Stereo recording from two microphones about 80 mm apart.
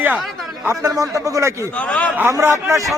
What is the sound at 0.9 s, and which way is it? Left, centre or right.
Speech, right.